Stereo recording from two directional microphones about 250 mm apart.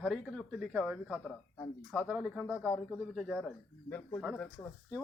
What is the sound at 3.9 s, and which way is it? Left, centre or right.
Speech, centre.